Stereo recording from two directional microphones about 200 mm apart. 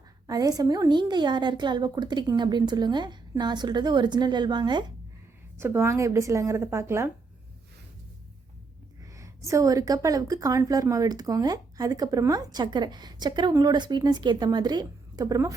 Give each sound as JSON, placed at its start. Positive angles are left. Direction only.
{"t": 0.3, "sound": "a woman's voice", "side_deg": -20}
{"t": 9.1, "sound": "a woman's voice", "side_deg": -15}